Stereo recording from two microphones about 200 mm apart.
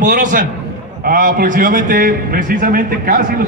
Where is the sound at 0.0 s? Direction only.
40° right (ahead or behind).